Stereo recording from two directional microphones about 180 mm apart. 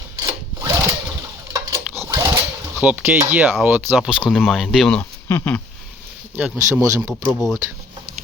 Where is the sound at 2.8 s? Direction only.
5° right (ahead or behind); by 5.6 s 15° left (ahead or behind).